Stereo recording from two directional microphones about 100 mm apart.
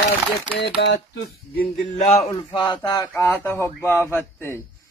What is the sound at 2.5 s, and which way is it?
Speech, 45° left (ahead or behind).